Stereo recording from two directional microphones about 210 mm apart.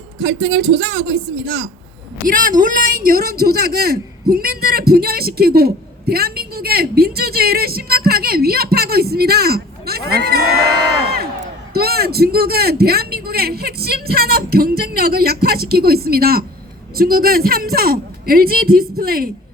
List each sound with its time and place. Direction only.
0.2 s a man's voice: 55° right (ahead or behind)
2.2 s a man's voice: 40° right (ahead or behind)
11.7 s a man's voice: 50° right (ahead or behind)